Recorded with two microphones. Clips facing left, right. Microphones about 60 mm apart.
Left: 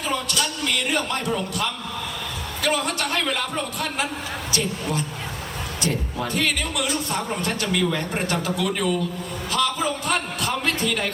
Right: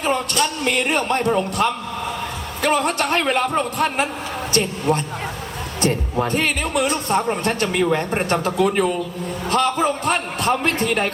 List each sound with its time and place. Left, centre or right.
0.0 s a man's voice: right